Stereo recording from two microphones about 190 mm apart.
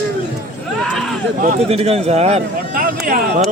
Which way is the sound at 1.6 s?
30° right (ahead or behind).